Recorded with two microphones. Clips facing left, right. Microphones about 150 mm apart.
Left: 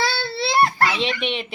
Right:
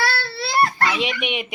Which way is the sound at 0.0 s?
25° left (ahead or behind).